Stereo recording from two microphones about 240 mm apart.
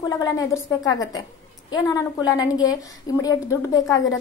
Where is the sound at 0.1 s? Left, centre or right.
Centre.